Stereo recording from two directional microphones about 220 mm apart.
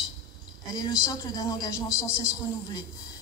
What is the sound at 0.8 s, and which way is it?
Speech, 15° left (ahead or behind).